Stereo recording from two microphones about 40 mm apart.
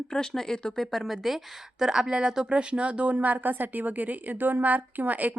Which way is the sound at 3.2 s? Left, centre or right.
Right.